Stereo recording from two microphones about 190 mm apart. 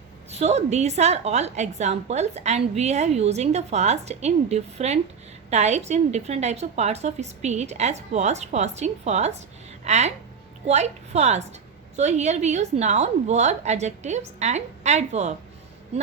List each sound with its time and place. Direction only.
0.3 s a woman's voice: 35° right (ahead or behind)